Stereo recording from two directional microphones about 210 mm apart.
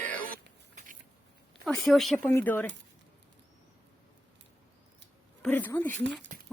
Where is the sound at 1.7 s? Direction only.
Centre (ahead or behind).